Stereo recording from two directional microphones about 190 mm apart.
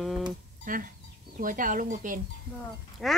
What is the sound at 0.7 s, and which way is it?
Speech, 45° right (ahead or behind).